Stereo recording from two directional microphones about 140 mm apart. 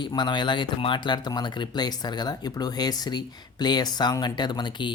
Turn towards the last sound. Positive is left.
turn(degrees=35)  # may be behind; listen again after turning